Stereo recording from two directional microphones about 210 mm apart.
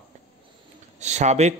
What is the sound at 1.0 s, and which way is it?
Speech, 35° right (ahead or behind).